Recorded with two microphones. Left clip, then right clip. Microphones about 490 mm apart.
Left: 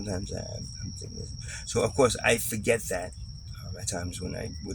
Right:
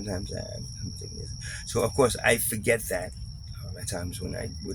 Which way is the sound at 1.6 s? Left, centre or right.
Right.